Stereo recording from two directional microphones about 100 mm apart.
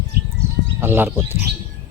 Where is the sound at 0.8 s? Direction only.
25° right (ahead or behind).